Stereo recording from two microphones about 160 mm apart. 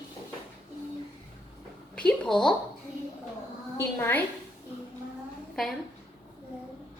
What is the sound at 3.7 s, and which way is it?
Speech, 15° left (ahead or behind).